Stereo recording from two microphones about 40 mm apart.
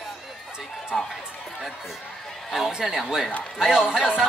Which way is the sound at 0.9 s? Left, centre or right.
Centre.